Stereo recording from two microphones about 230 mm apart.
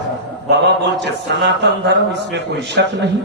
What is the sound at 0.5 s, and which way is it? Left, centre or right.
Mantra, right.